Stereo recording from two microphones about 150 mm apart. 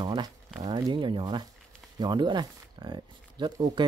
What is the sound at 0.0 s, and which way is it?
Speech, 30° right (ahead or behind).